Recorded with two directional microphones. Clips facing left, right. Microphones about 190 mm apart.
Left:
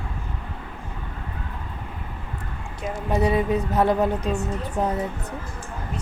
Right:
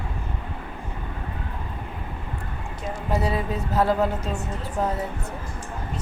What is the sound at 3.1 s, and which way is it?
Speech, 20° left (ahead or behind).